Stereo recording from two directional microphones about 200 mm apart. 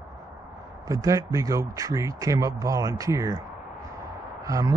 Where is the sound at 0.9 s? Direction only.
15° right (ahead or behind).